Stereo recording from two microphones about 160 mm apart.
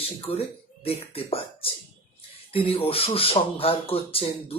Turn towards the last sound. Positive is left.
turn(degrees=35)  # may be behind; listen again after turning